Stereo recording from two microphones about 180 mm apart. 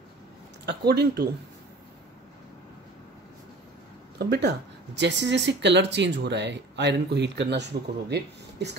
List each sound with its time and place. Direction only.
0.7 s speech: 60° right (ahead or behind)
4.3 s speech: 65° right (ahead or behind)